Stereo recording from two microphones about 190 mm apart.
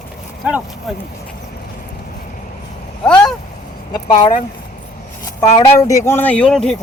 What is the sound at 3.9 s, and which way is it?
Speech, 20° left (ahead or behind).